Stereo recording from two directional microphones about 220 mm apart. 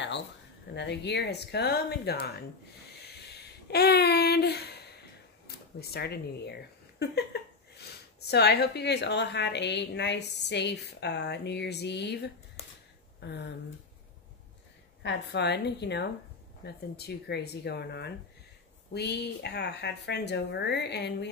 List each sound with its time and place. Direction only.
0.7 s speech: 50° left (ahead or behind)
3.6 s a sound: 45° left (ahead or behind)
5.8 s speech: 45° left (ahead or behind)
15.0 s speech: 50° left (ahead or behind)